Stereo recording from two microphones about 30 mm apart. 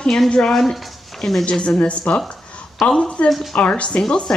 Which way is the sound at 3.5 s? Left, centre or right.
Left.